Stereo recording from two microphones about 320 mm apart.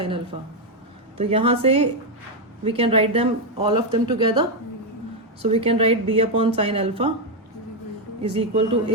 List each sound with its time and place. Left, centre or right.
1.2 s speech: centre
8.2 s speech: centre